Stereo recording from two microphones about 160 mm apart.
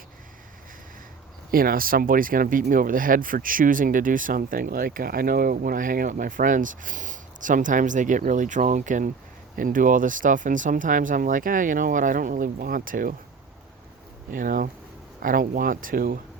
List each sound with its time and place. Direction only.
1.5 s speech: 65° right (ahead or behind)
14.3 s speech: 60° right (ahead or behind)